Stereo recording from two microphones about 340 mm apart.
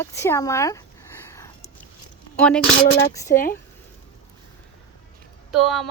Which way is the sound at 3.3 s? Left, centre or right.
Left.